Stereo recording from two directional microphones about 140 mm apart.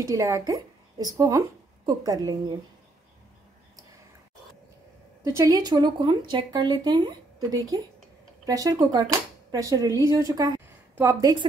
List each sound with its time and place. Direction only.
0.0 s speech: 25° right (ahead or behind)
5.2 s speech: 25° right (ahead or behind)